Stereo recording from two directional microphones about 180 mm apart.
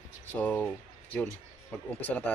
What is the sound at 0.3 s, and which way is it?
Speech, 10° left (ahead or behind).